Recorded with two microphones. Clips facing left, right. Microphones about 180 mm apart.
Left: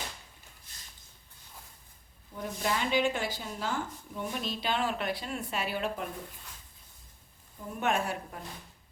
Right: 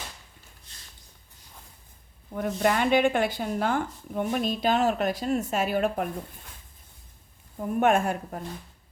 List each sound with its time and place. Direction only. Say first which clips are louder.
2.3 s speech: right 8 dB; 65° right (ahead or behind)
7.6 s a woman's voice: right 8 dB; 55° right (ahead or behind)